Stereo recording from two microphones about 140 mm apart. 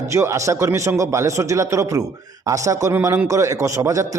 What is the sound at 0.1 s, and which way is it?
A man's voice, 20° right (ahead or behind).